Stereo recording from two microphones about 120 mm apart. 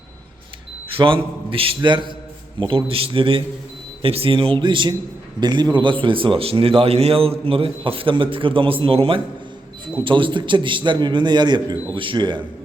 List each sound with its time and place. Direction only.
0.9 s a man's voice: 45° right (ahead or behind)